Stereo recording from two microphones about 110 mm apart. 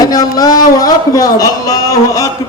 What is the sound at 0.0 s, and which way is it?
A man's voice, 35° left (ahead or behind).